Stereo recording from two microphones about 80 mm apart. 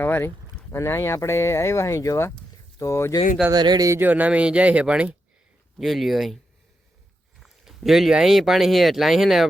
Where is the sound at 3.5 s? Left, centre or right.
Right.